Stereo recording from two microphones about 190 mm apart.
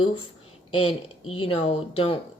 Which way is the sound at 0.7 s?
25° left (ahead or behind).